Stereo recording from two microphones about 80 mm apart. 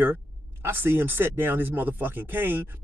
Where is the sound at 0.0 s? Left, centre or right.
Right.